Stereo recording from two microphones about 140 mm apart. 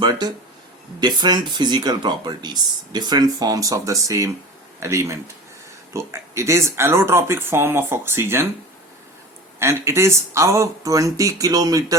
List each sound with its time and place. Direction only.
0.0 s speech: 30° right (ahead or behind)
9.6 s speech: 20° right (ahead or behind)